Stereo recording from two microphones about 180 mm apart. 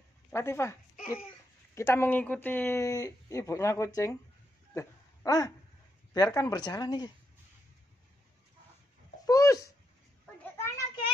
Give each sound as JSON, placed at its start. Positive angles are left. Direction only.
{"t": 0.3, "sound": "speech", "side_deg": 15}
{"t": 1.8, "sound": "speech", "side_deg": 15}
{"t": 4.7, "sound": "a sound", "side_deg": 20}
{"t": 6.1, "sound": "speech", "side_deg": 20}
{"t": 9.2, "sound": "dog", "side_deg": 20}
{"t": 10.4, "sound": "children playing", "side_deg": 15}